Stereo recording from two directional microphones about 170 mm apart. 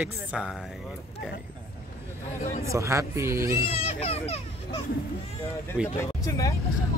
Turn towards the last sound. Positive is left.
turn(degrees=20)  # may be behind; listen again after turning